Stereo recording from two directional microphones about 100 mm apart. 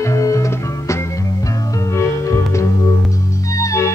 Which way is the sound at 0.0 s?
30° left (ahead or behind).